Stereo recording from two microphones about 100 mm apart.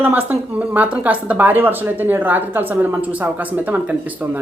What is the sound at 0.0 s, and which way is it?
Speech, 20° right (ahead or behind).